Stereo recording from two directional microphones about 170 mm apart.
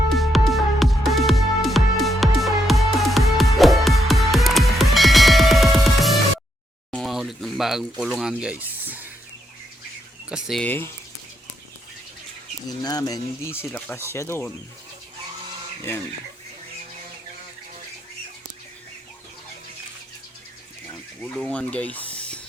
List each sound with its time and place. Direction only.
0.1 s music: centre (ahead or behind)
6.9 s a sound: centre (ahead or behind)
10.2 s speech: 5° right (ahead or behind)
10.6 s speech: 10° left (ahead or behind)
12.6 s speech: 20° left (ahead or behind)
20.9 s a sound: 5° left (ahead or behind)